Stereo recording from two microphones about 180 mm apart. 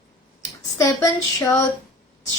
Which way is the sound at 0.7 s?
20° left (ahead or behind).